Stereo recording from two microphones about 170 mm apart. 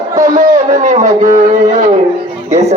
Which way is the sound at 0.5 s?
45° right (ahead or behind).